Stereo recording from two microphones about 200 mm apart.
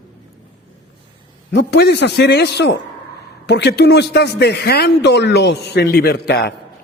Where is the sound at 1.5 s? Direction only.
55° left (ahead or behind).